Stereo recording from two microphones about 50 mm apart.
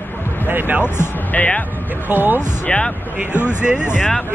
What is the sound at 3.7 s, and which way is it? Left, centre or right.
Speech, centre.